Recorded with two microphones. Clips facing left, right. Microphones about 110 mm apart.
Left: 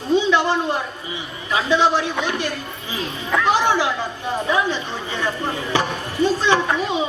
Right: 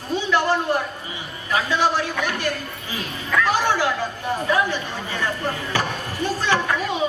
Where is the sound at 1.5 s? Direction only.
20° left (ahead or behind).